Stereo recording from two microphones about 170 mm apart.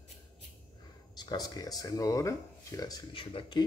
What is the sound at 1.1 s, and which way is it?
Speech, 25° left (ahead or behind).